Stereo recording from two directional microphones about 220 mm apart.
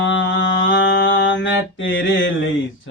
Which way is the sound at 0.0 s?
55° left (ahead or behind).